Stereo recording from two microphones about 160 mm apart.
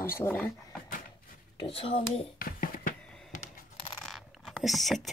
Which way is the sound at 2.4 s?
65° left (ahead or behind).